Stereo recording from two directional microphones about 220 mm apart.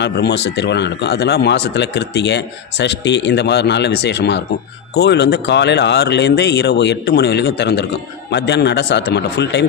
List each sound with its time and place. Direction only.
0.0 s speech: 50° left (ahead or behind)